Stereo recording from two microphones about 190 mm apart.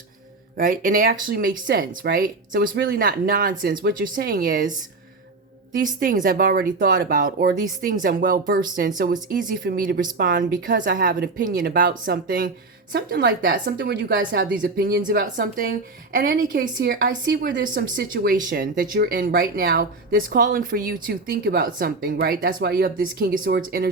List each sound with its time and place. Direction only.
0.5 s speech: 45° right (ahead or behind)
5.8 s speech: 45° right (ahead or behind)